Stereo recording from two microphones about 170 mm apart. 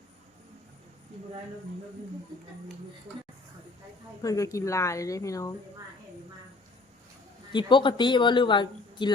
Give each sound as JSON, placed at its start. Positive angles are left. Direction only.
{"t": 4.2, "sound": "speech", "side_deg": 20}
{"t": 7.5, "sound": "speech", "side_deg": 30}